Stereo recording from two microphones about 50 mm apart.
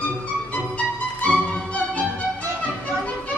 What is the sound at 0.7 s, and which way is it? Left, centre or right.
Music, left.